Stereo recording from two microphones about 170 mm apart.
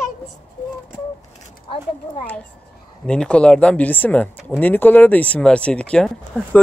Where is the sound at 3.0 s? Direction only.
5° left (ahead or behind).